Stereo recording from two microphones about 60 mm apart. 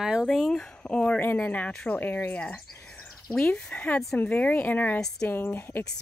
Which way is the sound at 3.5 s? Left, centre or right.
Left.